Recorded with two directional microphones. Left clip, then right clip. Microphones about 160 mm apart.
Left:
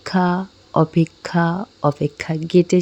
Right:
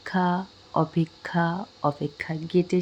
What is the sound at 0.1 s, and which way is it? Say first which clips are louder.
Speech: left 5 dB; 35° left (ahead or behind).